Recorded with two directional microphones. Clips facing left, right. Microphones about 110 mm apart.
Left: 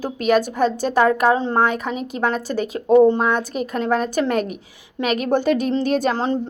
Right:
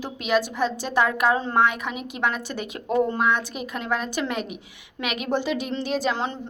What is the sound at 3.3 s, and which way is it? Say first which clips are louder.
A woman's voice: left 4 dB; 40° left (ahead or behind).